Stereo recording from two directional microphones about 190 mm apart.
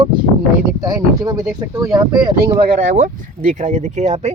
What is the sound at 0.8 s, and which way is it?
Speech, 20° right (ahead or behind).